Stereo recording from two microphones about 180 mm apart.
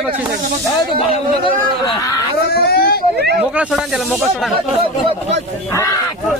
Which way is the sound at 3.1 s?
65° right (ahead or behind).